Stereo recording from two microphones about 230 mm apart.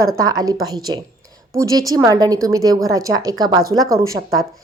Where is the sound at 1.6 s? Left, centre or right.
Centre.